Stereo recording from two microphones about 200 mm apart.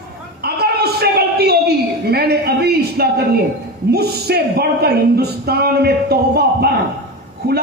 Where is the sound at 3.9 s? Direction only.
55° right (ahead or behind).